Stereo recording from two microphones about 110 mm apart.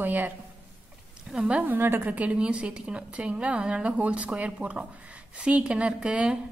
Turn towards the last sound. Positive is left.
turn(degrees=-10)  # may be behind; listen again after turning